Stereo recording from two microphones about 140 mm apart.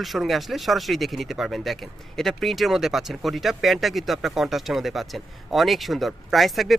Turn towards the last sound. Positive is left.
turn(degrees=0)  # may be behind; listen again after turning